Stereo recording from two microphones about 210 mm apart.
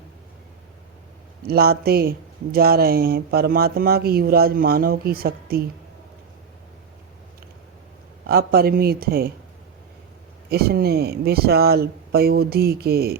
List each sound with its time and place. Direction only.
1.5 s speech: 50° right (ahead or behind)
8.3 s speech: 45° right (ahead or behind)
10.5 s speech: 50° right (ahead or behind)